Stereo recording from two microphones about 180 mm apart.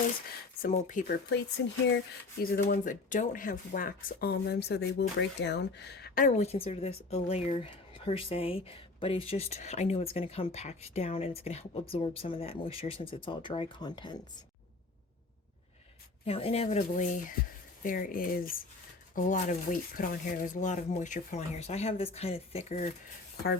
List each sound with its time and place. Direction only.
0.7 s speech: 45° left (ahead or behind); by 1.4 s 60° left (ahead or behind)
1.6 s speech: 85° left
2.4 s speech: 60° left (ahead or behind)
2.8 s speech: 45° left (ahead or behind); by 6.2 s 65° left (ahead or behind)
6.2 s speech: 35° left (ahead or behind)
16.2 s speech: 35° left (ahead or behind)